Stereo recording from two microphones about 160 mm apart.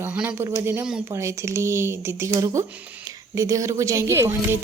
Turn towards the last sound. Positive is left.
turn(degrees=-15)  # may be behind; listen again after turning